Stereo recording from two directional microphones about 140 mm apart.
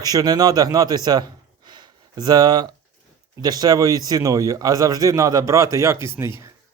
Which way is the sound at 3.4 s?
30° right (ahead or behind).